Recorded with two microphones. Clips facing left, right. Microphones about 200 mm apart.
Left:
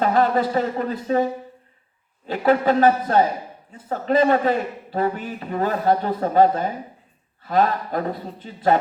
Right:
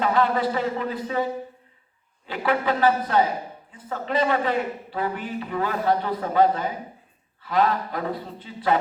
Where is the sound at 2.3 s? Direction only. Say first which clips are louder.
Left 6 dB; 40° left (ahead or behind).